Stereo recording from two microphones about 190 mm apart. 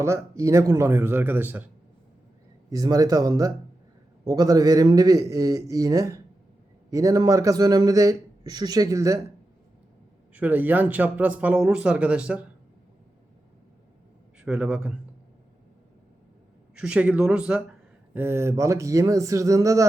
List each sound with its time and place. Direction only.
0.0 s a man's voice: 15° right (ahead or behind)
10.3 s speech: 10° right (ahead or behind)
14.4 s speech: 5° right (ahead or behind)
16.7 s speech: 5° right (ahead or behind)